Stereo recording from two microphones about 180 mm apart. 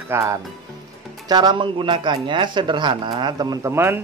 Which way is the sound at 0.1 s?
15° right (ahead or behind).